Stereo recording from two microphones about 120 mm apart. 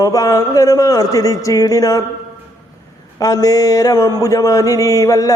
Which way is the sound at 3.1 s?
30° left (ahead or behind).